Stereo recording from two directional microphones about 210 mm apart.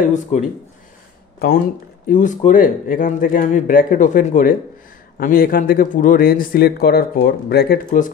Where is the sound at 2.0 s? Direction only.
35° left (ahead or behind).